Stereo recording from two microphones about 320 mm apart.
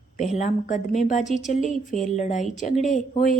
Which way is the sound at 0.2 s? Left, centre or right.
Left.